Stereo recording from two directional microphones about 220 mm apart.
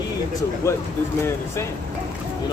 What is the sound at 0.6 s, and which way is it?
Speech, 15° left (ahead or behind).